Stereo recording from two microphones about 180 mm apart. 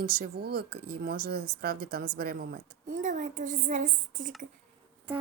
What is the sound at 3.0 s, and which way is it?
A woman's voice, 45° right (ahead or behind).